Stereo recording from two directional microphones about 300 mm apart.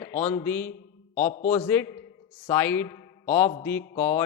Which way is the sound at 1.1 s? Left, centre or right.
Left.